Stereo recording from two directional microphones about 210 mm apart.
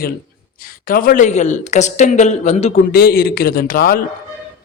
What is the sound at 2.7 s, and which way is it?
A man's voice, 45° left (ahead or behind).